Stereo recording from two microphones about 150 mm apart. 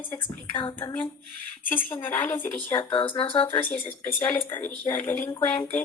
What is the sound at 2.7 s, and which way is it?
Speech, 35° left (ahead or behind).